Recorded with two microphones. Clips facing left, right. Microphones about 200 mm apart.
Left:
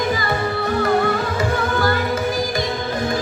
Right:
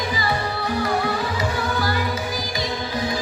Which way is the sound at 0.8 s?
50° left (ahead or behind).